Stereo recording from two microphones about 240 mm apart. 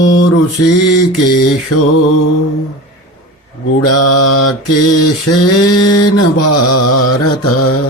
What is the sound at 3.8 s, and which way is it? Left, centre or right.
Mantra, left.